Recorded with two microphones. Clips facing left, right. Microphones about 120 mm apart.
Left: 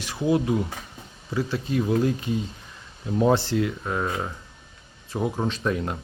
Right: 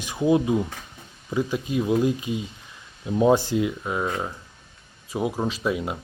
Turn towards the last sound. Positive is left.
turn(degrees=-10)  # may be behind; listen again after turning